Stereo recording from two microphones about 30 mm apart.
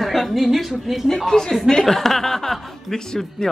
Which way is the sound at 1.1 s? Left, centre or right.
Centre.